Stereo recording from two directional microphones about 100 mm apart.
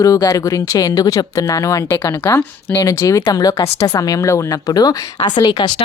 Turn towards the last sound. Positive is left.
turn(degrees=45)  # may be behind; listen again after turning